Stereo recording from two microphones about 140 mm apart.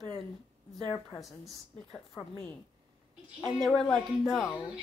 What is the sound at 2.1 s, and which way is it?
Speech, 15° left (ahead or behind).